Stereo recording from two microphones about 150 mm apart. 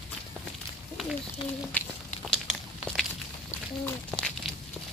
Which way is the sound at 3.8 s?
5° left (ahead or behind).